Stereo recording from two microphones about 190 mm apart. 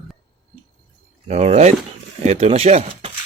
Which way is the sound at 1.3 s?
35° right (ahead or behind).